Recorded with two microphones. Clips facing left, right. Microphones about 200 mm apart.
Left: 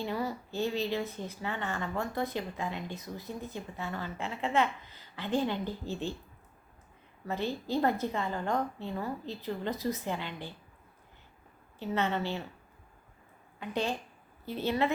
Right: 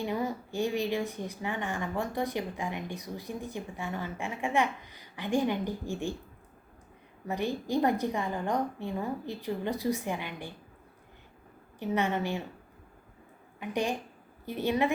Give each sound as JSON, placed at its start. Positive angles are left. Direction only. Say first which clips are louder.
{"t": 0.0, "sound": "a woman's voice", "louder": "right 2 dB", "side_deg": -15}
{"t": 7.3, "sound": "a woman's voice", "louder": "right 2 dB", "side_deg": -15}
{"t": 11.8, "sound": "a woman's voice", "louder": "right 2 dB", "side_deg": -15}
{"t": 13.6, "sound": "a woman's voice", "louder": "right 2 dB", "side_deg": -15}